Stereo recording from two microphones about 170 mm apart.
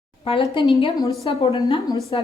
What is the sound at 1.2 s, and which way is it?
Speech, 35° left (ahead or behind).